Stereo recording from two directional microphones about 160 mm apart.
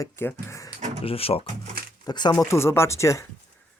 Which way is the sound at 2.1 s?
25° left (ahead or behind).